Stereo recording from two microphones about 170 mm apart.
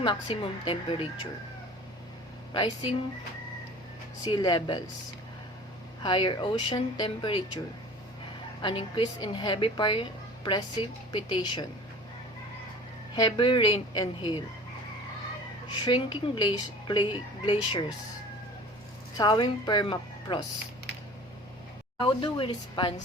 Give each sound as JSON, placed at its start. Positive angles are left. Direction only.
{"t": 0.0, "sound": "a woman's voice", "side_deg": 30}
{"t": 2.5, "sound": "a woman's voice", "side_deg": 30}
{"t": 4.3, "sound": "a woman's voice", "side_deg": 25}
{"t": 6.0, "sound": "a woman's voice", "side_deg": 25}
{"t": 8.6, "sound": "a woman's voice", "side_deg": 30}
{"t": 13.1, "sound": "a woman's voice", "side_deg": 25}
{"t": 15.7, "sound": "a woman's voice", "side_deg": 25}
{"t": 19.1, "sound": "a woman's voice", "side_deg": 25}
{"t": 21.9, "sound": "a woman's voice", "side_deg": 30}